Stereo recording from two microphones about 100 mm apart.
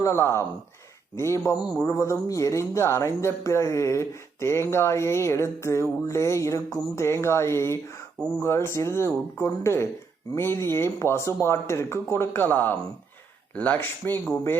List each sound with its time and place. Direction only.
0.0 s speech: 30° left (ahead or behind)
8.2 s speech: 10° left (ahead or behind)
8.4 s speech: 25° left (ahead or behind)